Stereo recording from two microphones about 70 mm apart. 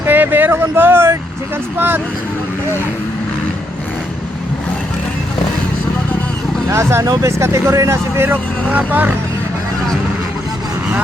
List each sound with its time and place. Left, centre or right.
0.0 s vehicle: right
6.7 s speech: right
7.0 s speech: right
8.7 s speech: right